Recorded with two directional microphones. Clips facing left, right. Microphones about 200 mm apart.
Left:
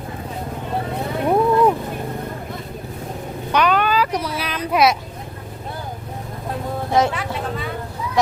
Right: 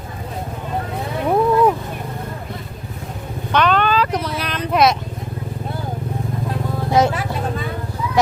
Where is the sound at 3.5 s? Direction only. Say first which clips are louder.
Right 1 dB; 10° left (ahead or behind).